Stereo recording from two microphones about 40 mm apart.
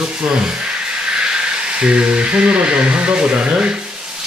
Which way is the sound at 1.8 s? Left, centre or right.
Right.